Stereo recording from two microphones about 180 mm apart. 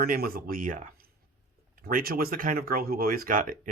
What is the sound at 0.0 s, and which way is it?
Speech, 55° right (ahead or behind).